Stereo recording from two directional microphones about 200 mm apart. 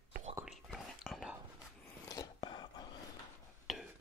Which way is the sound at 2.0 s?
20° left (ahead or behind).